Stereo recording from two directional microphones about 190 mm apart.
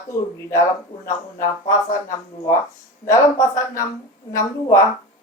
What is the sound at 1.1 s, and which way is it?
Speech, 15° left (ahead or behind).